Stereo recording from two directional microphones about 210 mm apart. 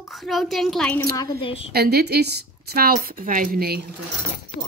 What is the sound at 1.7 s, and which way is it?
Speech, 50° right (ahead or behind).